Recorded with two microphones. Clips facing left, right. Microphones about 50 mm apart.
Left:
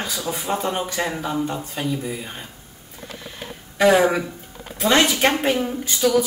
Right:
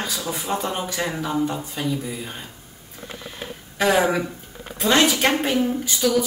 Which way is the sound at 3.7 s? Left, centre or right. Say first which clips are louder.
Left 3 dB; centre.